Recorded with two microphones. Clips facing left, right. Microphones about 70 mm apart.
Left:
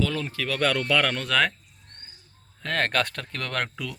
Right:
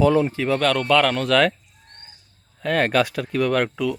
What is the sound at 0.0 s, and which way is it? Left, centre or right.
Speech, centre.